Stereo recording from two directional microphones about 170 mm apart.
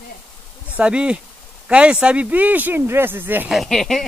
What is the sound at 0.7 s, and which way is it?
A man's voice, 5° right (ahead or behind).